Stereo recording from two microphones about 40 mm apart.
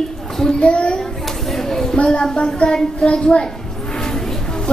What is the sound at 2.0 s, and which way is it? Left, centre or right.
A child's voice, left.